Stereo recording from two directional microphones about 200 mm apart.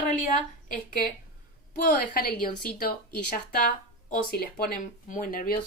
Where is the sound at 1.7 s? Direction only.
45° left (ahead or behind).